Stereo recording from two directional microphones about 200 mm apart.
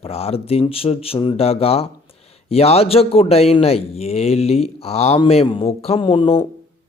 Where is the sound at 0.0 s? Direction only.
30° left (ahead or behind).